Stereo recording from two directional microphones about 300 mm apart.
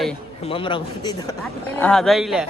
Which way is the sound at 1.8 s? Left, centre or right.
Centre.